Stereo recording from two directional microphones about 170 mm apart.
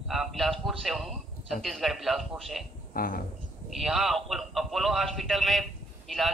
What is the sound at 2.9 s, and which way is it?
Speech, 55° left (ahead or behind).